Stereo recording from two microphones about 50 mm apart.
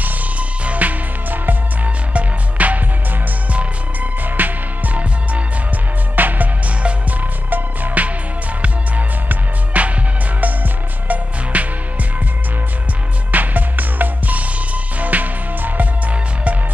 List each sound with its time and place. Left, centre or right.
0.0 s music: right
11.5 s music: right
13.3 s music: right